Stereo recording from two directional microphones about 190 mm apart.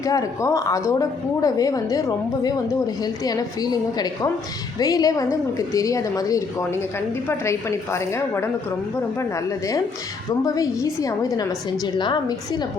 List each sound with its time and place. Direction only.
0.0 s a woman's voice: 15° left (ahead or behind)
7.9 s a woman's voice: 15° left (ahead or behind)
10.4 s a woman's voice: 20° left (ahead or behind)